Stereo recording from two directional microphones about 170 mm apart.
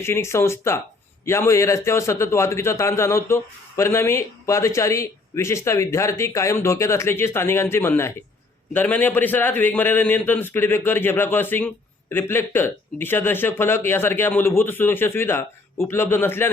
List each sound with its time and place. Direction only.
0.0 s a man's voice: 15° left (ahead or behind)